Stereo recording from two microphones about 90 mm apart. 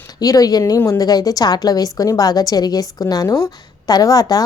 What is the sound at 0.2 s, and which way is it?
A woman's voice, 45° left (ahead or behind).